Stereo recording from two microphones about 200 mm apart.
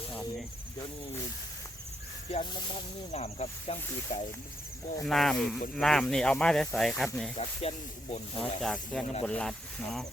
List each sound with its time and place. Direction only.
2.3 s speech: 20° left (ahead or behind)
3.1 s speech: 35° left (ahead or behind)
5.0 s speech: centre (ahead or behind)
7.7 s speech: 30° left (ahead or behind)
8.4 s speech: centre (ahead or behind)